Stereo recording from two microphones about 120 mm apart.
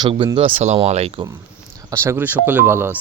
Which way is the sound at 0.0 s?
40° right (ahead or behind).